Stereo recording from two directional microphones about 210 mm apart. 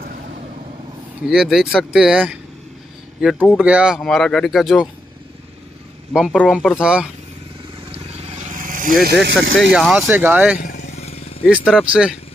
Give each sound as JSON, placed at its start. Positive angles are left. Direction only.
{"t": 1.2, "sound": "speech", "side_deg": -5}
{"t": 6.1, "sound": "speech", "side_deg": 0}
{"t": 7.9, "sound": "vehicle", "side_deg": -35}
{"t": 9.0, "sound": "speech", "side_deg": -55}
{"t": 9.6, "sound": "speech", "side_deg": 0}
{"t": 10.6, "sound": "vehicle", "side_deg": 45}
{"t": 11.0, "sound": "vehicle", "side_deg": 30}
{"t": 11.4, "sound": "speech", "side_deg": -5}